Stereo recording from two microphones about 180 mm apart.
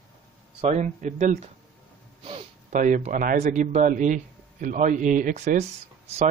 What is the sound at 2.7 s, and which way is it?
Speech, 45° right (ahead or behind).